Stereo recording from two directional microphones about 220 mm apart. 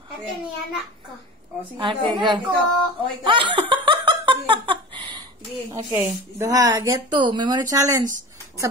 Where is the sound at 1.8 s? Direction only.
20° right (ahead or behind).